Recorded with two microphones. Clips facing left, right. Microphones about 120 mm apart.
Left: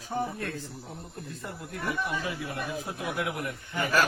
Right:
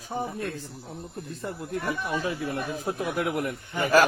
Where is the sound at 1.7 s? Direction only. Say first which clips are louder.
Right 2 dB; 35° right (ahead or behind).